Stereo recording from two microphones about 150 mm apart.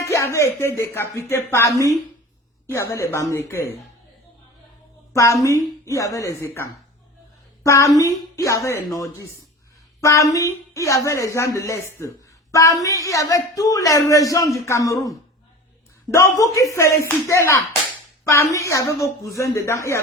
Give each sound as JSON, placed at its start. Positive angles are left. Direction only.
{"t": 0.0, "sound": "a sound", "side_deg": 20}
{"t": 0.3, "sound": "a woman's voice", "side_deg": 20}
{"t": 5.1, "sound": "a woman's voice", "side_deg": 20}
{"t": 16.1, "sound": "a woman's voice", "side_deg": 20}